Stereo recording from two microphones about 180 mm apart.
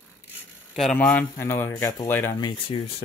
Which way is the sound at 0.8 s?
5° left (ahead or behind).